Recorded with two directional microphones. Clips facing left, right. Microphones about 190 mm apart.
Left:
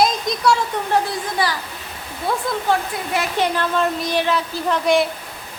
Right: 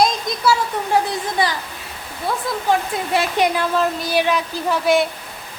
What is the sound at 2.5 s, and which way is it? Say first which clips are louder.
A woman's voice: right 2 dB; 5° right (ahead or behind).